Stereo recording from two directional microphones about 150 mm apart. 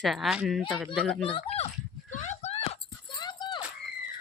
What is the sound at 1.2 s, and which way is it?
Speech, 40° left (ahead or behind).